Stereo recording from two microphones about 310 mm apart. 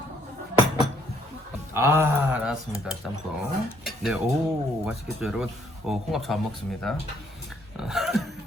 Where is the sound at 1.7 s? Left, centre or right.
Centre.